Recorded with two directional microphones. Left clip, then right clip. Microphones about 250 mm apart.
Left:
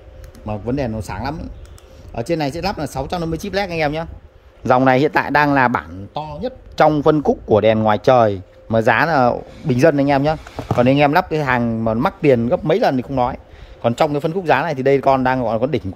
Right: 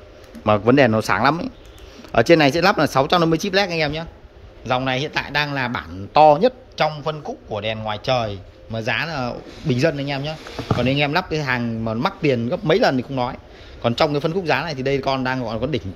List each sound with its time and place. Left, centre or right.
0.5 s speech: centre
4.6 s a man's voice: left; by 6.6 s centre
7.5 s a man's voice: left